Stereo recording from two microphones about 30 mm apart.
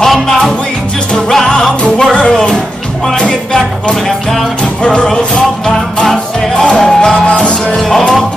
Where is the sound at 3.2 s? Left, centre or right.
Left.